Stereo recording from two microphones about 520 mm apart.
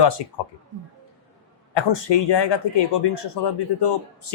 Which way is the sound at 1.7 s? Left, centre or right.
Left.